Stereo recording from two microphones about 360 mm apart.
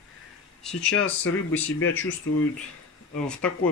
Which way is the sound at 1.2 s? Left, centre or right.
Left.